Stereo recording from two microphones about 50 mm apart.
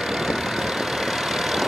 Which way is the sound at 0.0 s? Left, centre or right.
Centre.